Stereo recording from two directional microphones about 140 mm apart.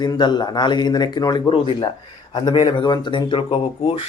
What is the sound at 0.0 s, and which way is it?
Speech, 30° left (ahead or behind).